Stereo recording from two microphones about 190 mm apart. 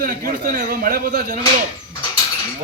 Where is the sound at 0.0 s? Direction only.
50° right (ahead or behind).